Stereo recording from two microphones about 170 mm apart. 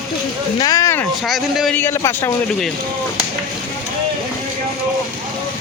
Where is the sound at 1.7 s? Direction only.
15° left (ahead or behind).